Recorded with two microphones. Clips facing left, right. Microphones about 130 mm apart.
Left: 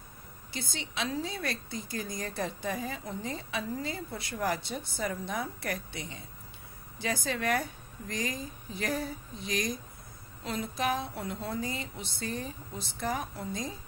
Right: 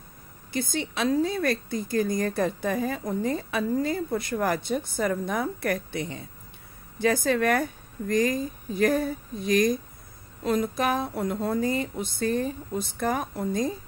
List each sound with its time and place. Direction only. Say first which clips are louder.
0.5 s speech: right 11 dB; 50° right (ahead or behind)